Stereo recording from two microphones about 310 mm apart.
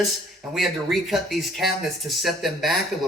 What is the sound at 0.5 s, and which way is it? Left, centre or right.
Speech, centre.